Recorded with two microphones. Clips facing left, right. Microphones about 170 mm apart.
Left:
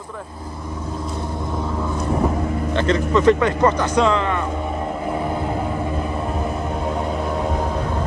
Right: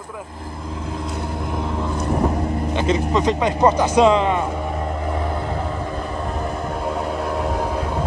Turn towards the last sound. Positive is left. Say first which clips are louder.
# even
turn(degrees=-10)  # may be behind; listen again after turning